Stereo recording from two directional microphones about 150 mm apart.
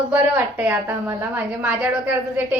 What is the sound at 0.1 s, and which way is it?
A woman's voice, 10° right (ahead or behind).